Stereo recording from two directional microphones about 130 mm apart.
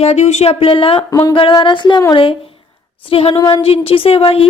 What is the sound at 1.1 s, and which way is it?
Speech, 30° left (ahead or behind).